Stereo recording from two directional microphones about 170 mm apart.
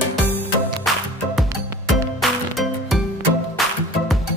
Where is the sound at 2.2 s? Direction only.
Centre (ahead or behind).